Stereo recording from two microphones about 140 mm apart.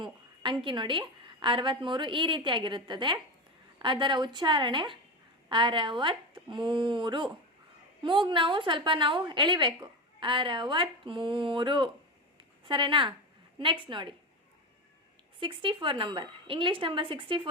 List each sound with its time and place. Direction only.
0.0 s a woman's voice: 35° right (ahead or behind)
15.4 s a woman's voice: 35° right (ahead or behind)